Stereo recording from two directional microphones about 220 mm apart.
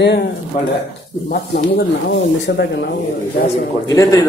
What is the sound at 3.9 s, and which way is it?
Speech, 15° left (ahead or behind).